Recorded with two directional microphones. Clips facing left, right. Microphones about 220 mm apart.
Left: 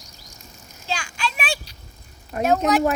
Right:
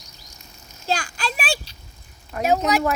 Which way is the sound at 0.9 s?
35° right (ahead or behind).